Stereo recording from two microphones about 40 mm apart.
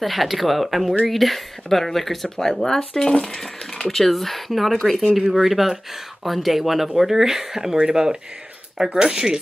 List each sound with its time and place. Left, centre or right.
0.0 s speech: centre
3.9 s speech: centre